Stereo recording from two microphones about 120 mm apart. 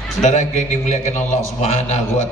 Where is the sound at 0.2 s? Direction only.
75° left (ahead or behind).